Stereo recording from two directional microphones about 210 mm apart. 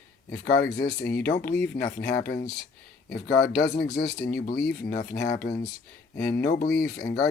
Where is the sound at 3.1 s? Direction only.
50° left (ahead or behind).